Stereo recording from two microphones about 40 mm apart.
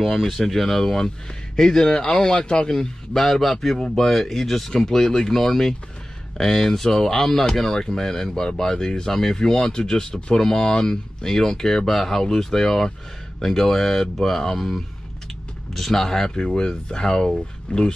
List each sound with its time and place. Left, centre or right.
0.0 s speech: centre
3.7 s speech: centre
15.7 s speech: centre